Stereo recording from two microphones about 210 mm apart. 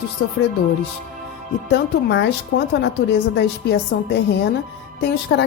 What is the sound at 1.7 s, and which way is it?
A woman's voice, 60° left (ahead or behind).